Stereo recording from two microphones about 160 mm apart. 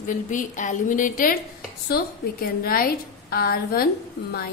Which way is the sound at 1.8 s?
70° left (ahead or behind).